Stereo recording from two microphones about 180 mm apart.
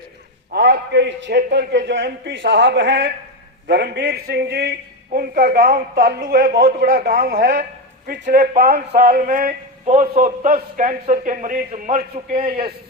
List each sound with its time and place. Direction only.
0.5 s a man's voice: 65° right (ahead or behind)
3.7 s a man's voice: 70° right (ahead or behind)
5.1 s a man's voice: 55° right (ahead or behind)